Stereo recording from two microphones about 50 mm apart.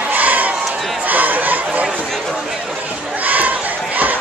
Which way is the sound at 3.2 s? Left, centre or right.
Right.